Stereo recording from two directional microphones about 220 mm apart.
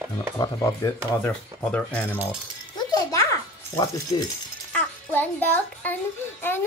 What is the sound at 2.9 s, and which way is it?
Music, 15° left (ahead or behind).